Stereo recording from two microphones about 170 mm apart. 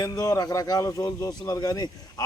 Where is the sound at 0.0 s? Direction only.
20° left (ahead or behind).